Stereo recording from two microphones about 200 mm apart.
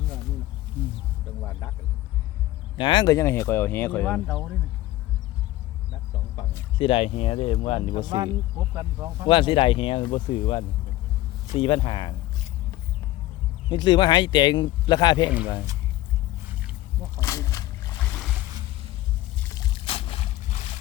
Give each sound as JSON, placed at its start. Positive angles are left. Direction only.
{"t": 2.7, "sound": "speech", "side_deg": 25}
{"t": 6.7, "sound": "speech", "side_deg": 25}
{"t": 8.7, "sound": "speech", "side_deg": -15}
{"t": 9.2, "sound": "speech", "side_deg": 25}
{"t": 13.7, "sound": "speech", "side_deg": 25}
{"t": 17.2, "sound": "splash", "side_deg": 15}
{"t": 18.1, "sound": "a sound", "side_deg": 0}
{"t": 19.4, "sound": "boat", "side_deg": 15}